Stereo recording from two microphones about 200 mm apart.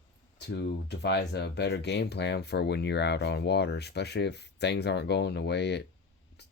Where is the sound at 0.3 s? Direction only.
60° left (ahead or behind).